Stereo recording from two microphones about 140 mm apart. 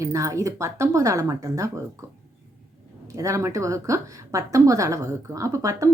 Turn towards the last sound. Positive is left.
turn(degrees=-25)  # may be behind; listen again after turning